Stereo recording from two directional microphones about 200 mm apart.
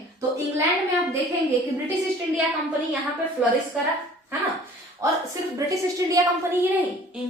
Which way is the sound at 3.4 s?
5° right (ahead or behind).